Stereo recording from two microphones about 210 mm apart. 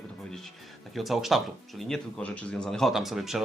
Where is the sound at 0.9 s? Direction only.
Centre (ahead or behind).